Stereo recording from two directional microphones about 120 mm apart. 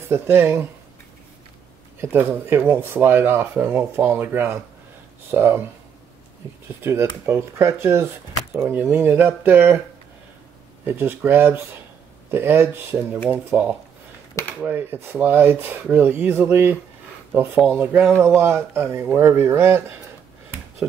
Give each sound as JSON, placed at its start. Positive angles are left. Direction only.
{"t": 0.1, "sound": "speech", "side_deg": -20}
{"t": 2.0, "sound": "speech", "side_deg": -20}
{"t": 6.8, "sound": "speech", "side_deg": -20}
{"t": 10.9, "sound": "speech", "side_deg": -20}